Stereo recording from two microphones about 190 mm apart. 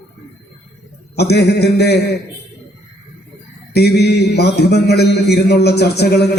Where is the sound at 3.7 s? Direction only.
60° left (ahead or behind).